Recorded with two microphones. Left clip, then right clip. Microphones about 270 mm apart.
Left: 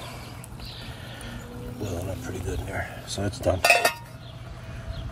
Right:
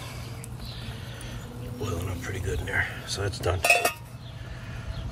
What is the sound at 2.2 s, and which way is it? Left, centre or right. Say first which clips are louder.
Cutlery: right 1 dB; centre.